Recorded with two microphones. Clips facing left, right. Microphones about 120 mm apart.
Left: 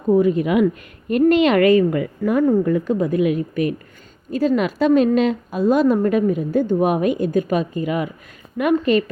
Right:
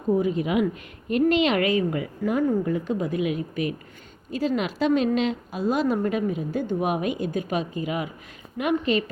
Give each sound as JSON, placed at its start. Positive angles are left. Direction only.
{"t": 0.1, "sound": "a woman's voice", "side_deg": 55}